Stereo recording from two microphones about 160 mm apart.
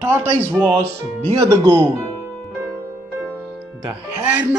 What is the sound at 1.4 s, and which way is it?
Speech, 15° right (ahead or behind).